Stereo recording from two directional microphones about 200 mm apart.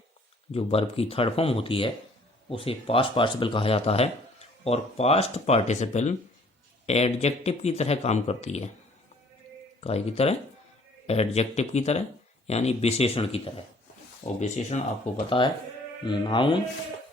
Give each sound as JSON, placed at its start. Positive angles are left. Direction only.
{"t": 0.5, "sound": "speech", "side_deg": 30}
{"t": 9.8, "sound": "speech", "side_deg": 30}